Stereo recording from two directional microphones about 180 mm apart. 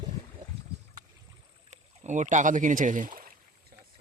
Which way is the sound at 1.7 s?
40° right (ahead or behind).